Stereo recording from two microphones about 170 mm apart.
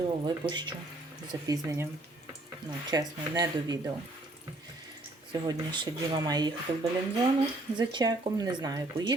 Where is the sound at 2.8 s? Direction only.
25° right (ahead or behind).